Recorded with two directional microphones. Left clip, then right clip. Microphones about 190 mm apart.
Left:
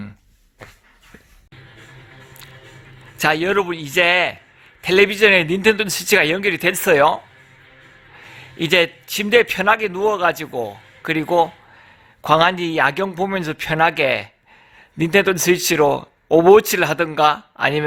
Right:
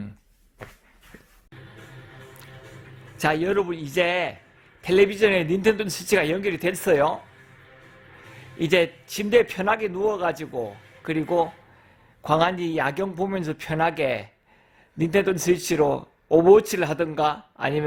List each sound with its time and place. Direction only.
3.2 s a man's voice: centre (ahead or behind)
8.4 s a man's voice: 5° right (ahead or behind)